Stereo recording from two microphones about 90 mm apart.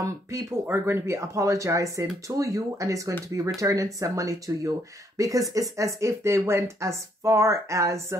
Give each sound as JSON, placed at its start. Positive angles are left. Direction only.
{"t": 0.0, "sound": "speech", "side_deg": -30}